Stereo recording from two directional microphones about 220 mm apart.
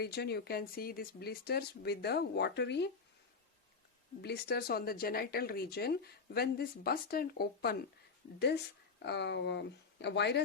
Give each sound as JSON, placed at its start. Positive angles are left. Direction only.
{"t": 0.0, "sound": "speech", "side_deg": 45}
{"t": 4.2, "sound": "speech", "side_deg": 45}